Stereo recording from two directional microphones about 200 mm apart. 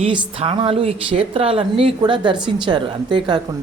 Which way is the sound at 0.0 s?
25° right (ahead or behind).